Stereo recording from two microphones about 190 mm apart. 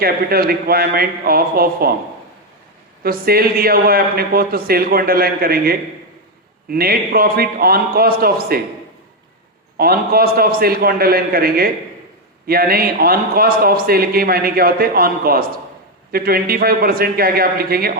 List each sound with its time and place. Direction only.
0.0 s a man's voice: 50° right (ahead or behind)
3.0 s a man's voice: 50° right (ahead or behind)
9.7 s a man's voice: 50° right (ahead or behind)